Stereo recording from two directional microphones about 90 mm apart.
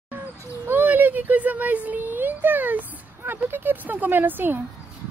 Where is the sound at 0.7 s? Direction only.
20° right (ahead or behind).